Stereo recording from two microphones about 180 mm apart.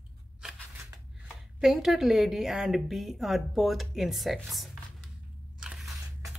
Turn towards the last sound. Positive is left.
turn(degrees=-5)  # may be behind; listen again after turning